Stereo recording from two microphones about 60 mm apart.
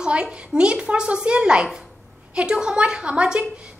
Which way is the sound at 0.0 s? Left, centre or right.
Centre.